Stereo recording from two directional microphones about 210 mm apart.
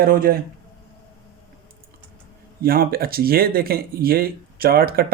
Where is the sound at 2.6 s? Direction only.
45° right (ahead or behind).